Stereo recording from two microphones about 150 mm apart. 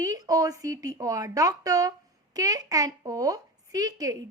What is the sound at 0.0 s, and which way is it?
Speech, 25° right (ahead or behind).